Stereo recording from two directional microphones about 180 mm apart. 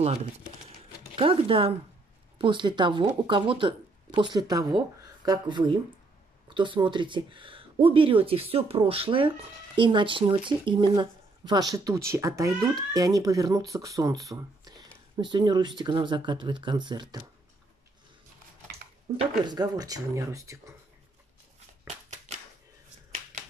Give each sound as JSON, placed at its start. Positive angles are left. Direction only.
{"t": 0.0, "sound": "speech", "side_deg": -35}
{"t": 19.1, "sound": "speech", "side_deg": -30}